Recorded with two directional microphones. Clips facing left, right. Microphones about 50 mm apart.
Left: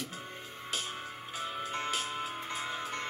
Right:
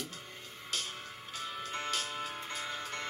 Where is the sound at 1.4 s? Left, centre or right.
Centre.